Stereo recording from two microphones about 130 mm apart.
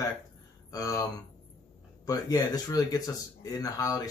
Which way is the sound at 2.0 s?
30° left (ahead or behind).